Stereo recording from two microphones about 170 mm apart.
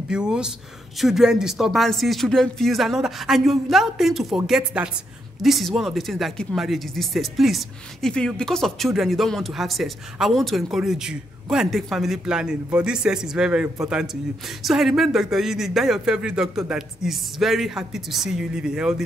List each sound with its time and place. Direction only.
0.1 s speech: 5° right (ahead or behind)